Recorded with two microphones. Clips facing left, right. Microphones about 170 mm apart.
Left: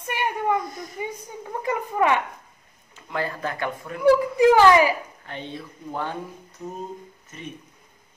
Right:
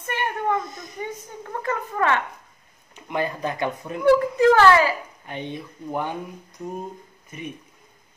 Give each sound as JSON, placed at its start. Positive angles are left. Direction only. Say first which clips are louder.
{"t": 0.0, "sound": "a sound", "louder": "even", "side_deg": 10}
{"t": 0.6, "sound": "speech", "louder": "left 1 dB", "side_deg": -20}
{"t": 0.9, "sound": "a woman's voice", "louder": "right 2 dB", "side_deg": 15}
{"t": 3.1, "sound": "speech", "louder": "right 2 dB", "side_deg": -20}
{"t": 4.0, "sound": "a woman's voice", "louder": "even", "side_deg": 15}
{"t": 5.2, "sound": "speech", "louder": "right 3 dB", "side_deg": -15}
{"t": 7.2, "sound": "speech", "louder": "right 4 dB", "side_deg": -15}